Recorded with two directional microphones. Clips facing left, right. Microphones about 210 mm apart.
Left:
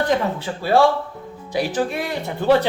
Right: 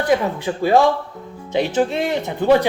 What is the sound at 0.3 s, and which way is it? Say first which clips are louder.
Speech: right 2 dB; 15° right (ahead or behind).